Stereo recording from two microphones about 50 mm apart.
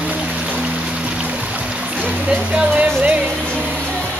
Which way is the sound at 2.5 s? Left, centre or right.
Right.